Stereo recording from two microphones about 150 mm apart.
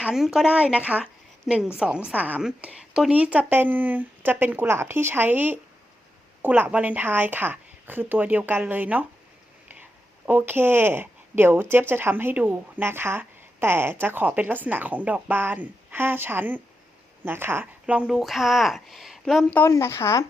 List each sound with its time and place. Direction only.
0.0 s speech: 5° right (ahead or behind)
10.2 s speech: 15° right (ahead or behind)
19.5 s speech: 15° left (ahead or behind)